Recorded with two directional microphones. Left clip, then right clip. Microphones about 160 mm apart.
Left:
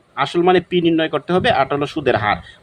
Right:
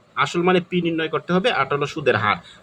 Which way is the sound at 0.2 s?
35° left (ahead or behind).